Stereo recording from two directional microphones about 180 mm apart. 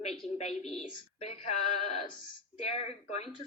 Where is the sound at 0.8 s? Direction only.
35° left (ahead or behind).